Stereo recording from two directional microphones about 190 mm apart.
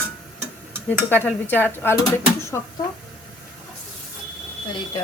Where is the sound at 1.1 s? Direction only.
10° left (ahead or behind).